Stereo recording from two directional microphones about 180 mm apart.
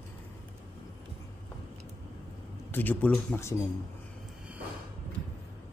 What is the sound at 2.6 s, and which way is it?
Speech, 10° left (ahead or behind).